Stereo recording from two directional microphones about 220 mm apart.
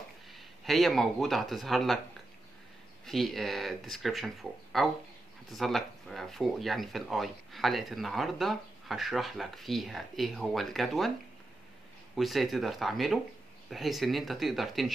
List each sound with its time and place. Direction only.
0.3 s speech: centre (ahead or behind)
3.1 s speech: centre (ahead or behind)
12.2 s speech: centre (ahead or behind)